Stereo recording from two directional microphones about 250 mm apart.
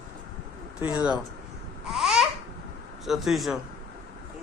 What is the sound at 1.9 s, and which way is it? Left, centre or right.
Babbling, centre.